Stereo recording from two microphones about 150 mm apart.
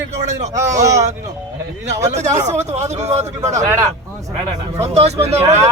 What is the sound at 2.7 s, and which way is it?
Speech, 50° right (ahead or behind).